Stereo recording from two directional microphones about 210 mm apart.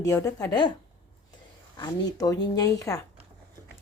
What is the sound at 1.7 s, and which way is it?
Speech, 20° left (ahead or behind).